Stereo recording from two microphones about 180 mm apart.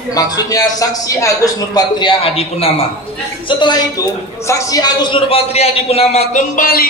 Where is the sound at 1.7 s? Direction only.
30° left (ahead or behind).